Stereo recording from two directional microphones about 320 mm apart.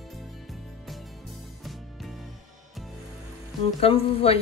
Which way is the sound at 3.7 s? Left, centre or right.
Centre.